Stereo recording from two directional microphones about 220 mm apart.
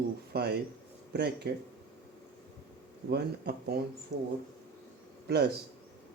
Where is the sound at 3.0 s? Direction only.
45° right (ahead or behind).